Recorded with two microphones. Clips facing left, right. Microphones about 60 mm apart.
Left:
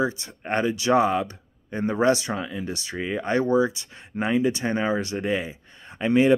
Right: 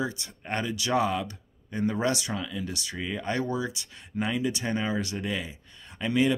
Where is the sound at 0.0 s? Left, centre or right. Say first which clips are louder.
Left 6 dB; left.